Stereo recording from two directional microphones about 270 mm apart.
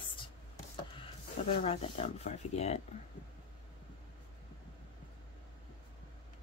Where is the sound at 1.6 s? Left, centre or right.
Left.